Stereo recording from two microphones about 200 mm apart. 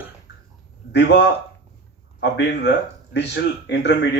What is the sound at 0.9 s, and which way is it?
Speech, 55° left (ahead or behind).